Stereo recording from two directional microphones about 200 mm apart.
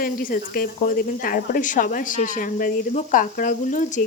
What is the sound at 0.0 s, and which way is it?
Speech, 45° left (ahead or behind).